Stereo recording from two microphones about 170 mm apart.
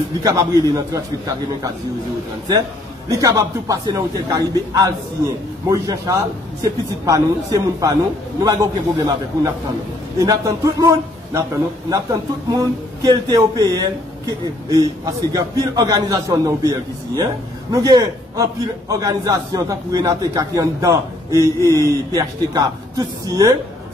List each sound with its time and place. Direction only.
0.2 s a man's voice: 20° right (ahead or behind)
3.1 s a man's voice: 20° right (ahead or behind)
15.3 s a man's voice: 20° right (ahead or behind)